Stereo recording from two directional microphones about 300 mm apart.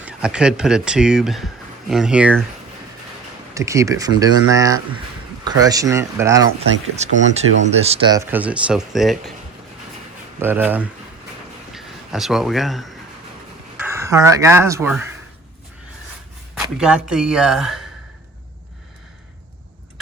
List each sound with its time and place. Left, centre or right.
0.0 s speech: centre
3.5 s speech: centre
6.9 s speech: right; by 9.3 s centre
10.4 s speech: centre
16.6 s speech: centre